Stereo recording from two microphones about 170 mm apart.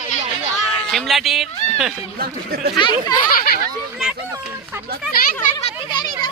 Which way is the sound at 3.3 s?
65° left (ahead or behind).